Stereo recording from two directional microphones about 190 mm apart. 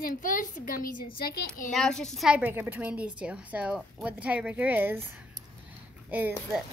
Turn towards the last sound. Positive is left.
turn(degrees=-10)  # may be behind; listen again after turning